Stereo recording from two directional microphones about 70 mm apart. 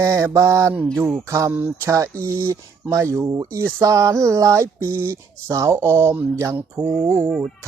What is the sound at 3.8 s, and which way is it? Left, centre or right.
Speech, right.